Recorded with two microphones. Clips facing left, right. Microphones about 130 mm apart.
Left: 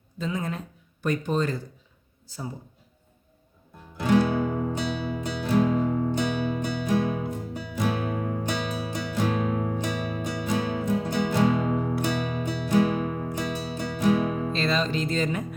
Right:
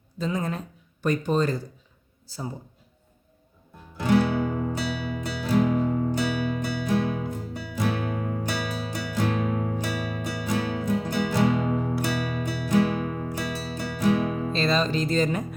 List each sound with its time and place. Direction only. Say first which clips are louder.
0.2 s speech: right 2 dB; 40° right (ahead or behind)
4.0 s music: even; 15° left (ahead or behind)
14.5 s music: right 5 dB; 35° right (ahead or behind)